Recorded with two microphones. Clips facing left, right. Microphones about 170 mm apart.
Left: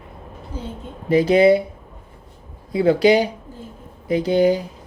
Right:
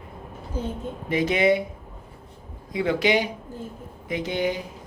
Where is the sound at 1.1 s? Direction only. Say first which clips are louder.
Left 7 dB; 35° left (ahead or behind).